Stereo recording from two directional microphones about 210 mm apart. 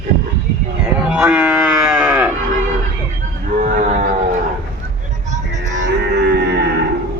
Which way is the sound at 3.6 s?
40° right (ahead or behind).